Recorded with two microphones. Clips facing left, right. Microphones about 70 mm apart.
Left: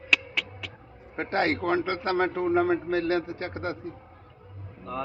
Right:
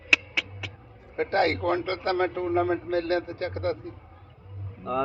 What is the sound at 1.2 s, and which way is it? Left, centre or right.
A man's voice, left.